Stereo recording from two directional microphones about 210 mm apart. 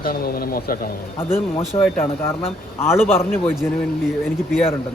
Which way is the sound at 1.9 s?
10° left (ahead or behind).